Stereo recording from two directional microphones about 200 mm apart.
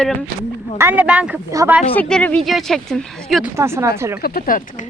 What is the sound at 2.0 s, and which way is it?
Speech, 5° left (ahead or behind).